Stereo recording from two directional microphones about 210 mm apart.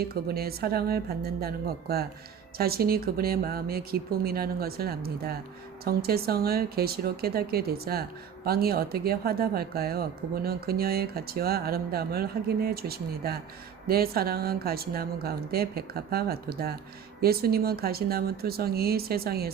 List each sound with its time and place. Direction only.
0.1 s speech: 45° right (ahead or behind)